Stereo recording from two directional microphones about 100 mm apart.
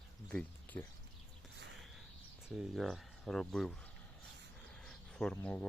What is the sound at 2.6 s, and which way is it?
Speech, centre (ahead or behind).